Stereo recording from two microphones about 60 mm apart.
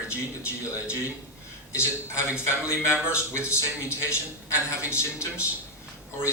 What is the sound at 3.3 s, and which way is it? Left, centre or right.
A man's voice, left.